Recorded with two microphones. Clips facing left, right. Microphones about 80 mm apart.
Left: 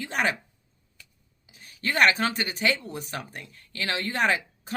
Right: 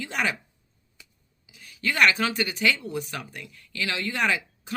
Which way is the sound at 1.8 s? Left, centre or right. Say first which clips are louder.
Even; left.